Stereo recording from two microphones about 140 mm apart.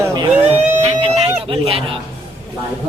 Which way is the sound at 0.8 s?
45° right (ahead or behind).